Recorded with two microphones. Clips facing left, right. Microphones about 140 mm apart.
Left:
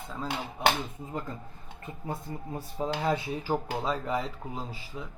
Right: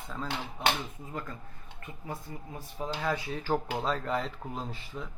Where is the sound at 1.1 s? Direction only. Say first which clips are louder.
Left 3 dB; 20° left (ahead or behind); by 5.1 s 5° left (ahead or behind).